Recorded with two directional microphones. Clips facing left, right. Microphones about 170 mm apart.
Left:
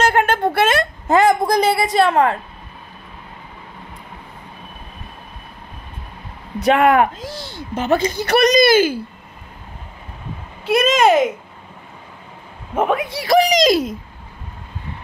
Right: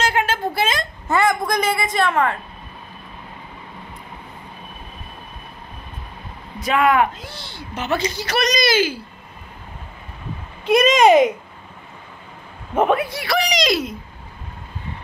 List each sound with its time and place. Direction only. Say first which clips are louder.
0.0 s a sound: left 5 dB; 55° left (ahead or behind)
1.2 s a woman's voice: left 4 dB; 30° left (ahead or behind)
6.6 s a woman's voice: left 4 dB; 55° left (ahead or behind)
10.6 s speech: right 1 dB; 5° left (ahead or behind)
12.7 s speech: right 1 dB; 10° left (ahead or behind)
13.1 s a woman's voice: left 7 dB; 40° left (ahead or behind)